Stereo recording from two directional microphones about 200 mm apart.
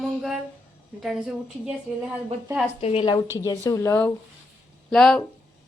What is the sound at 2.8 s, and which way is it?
A woman's voice, 30° left (ahead or behind).